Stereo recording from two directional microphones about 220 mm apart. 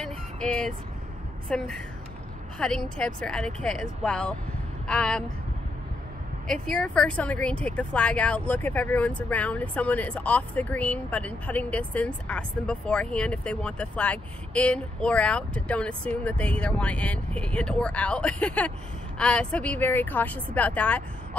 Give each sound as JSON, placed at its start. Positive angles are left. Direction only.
{"t": 0.0, "sound": "vehicle", "side_deg": 5}
{"t": 1.5, "sound": "speech", "side_deg": 5}
{"t": 6.4, "sound": "speech", "side_deg": 0}